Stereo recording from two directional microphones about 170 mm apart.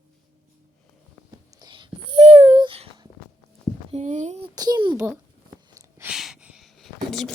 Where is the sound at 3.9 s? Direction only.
45° right (ahead or behind).